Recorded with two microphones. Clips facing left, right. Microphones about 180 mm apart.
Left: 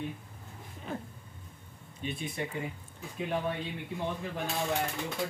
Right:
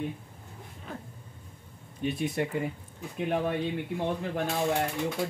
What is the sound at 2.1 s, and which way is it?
Speech, 65° right (ahead or behind).